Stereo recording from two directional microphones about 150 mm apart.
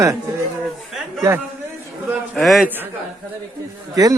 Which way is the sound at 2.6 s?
15° right (ahead or behind).